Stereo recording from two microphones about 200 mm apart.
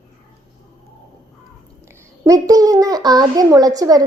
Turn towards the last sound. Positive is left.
turn(degrees=-20)  # may be behind; listen again after turning